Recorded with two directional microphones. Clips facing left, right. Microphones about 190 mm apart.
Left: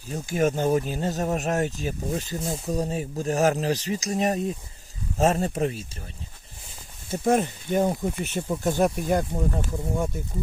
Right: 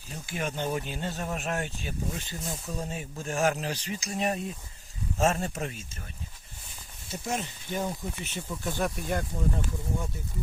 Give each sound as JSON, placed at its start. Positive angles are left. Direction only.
{"t": 0.1, "sound": "speech", "side_deg": 45}
{"t": 7.1, "sound": "speech", "side_deg": 55}